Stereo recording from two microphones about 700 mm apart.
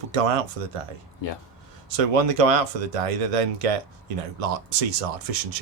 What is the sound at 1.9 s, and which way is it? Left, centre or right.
Speech, right.